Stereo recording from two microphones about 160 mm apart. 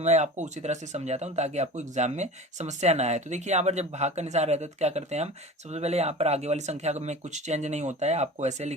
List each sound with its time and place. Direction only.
0.0 s speech: 45° right (ahead or behind)